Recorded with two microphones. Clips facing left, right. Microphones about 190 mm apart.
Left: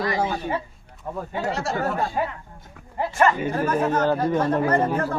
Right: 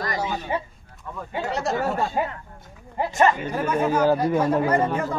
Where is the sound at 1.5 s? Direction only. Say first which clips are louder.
Right 2 dB; 20° right (ahead or behind).